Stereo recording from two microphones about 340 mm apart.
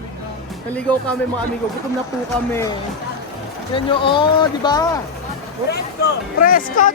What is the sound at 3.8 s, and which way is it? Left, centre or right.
Speech, centre.